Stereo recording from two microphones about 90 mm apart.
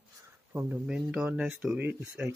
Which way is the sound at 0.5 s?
15° right (ahead or behind).